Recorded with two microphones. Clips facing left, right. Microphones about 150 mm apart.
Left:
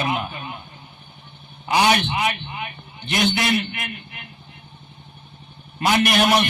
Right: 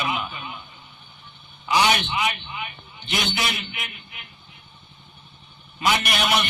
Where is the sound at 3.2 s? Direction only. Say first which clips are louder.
Left 11 dB; 55° left (ahead or behind).